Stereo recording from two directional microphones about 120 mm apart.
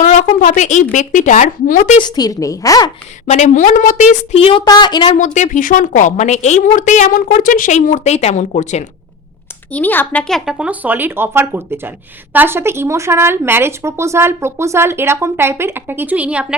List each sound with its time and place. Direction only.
0.3 s a woman's voice: 90° left
2.0 s a woman's voice: 35° left (ahead or behind)
3.2 s a woman's voice: 75° left (ahead or behind)
4.4 s speech: 50° left (ahead or behind)
4.6 s a woman's voice: 35° left (ahead or behind)
5.1 s a woman's voice: 85° left
9.7 s a woman's voice: 15° left (ahead or behind)
10.6 s speech: 15° right (ahead or behind)